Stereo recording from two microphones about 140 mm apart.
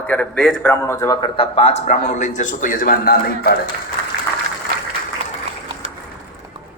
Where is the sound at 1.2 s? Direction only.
40° left (ahead or behind); by 3.6 s 90° left.